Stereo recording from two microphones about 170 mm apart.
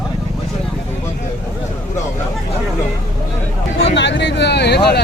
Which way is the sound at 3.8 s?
90° left.